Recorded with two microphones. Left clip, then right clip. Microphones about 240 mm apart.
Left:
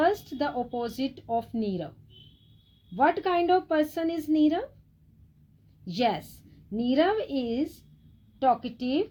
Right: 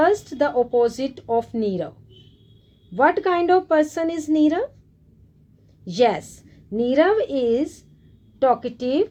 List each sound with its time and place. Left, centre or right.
0.0 s speech: left
2.9 s speech: left
5.8 s speech: left